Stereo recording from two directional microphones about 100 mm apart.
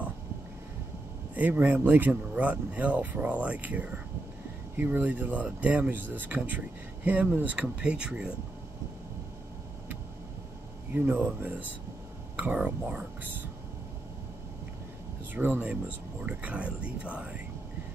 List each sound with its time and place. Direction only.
1.3 s speech: 15° right (ahead or behind)
11.0 s speech: 15° right (ahead or behind)
15.3 s speech: 15° right (ahead or behind)